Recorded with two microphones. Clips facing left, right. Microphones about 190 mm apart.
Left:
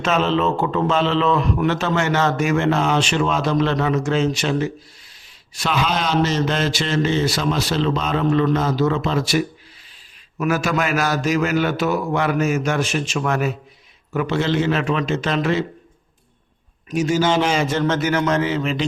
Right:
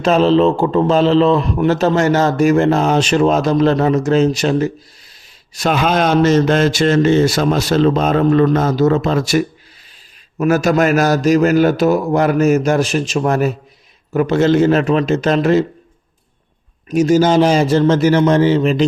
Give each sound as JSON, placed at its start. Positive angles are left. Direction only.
{"t": 0.0, "sound": "a man's voice", "side_deg": -35}
{"t": 16.9, "sound": "a man's voice", "side_deg": -40}